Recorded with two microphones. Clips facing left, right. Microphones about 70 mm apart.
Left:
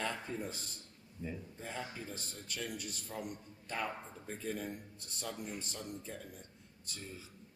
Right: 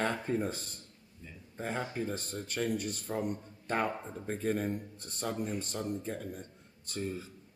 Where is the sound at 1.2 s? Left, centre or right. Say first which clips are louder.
Left 9 dB; centre.